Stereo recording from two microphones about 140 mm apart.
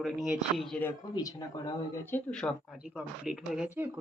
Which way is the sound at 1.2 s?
25° left (ahead or behind).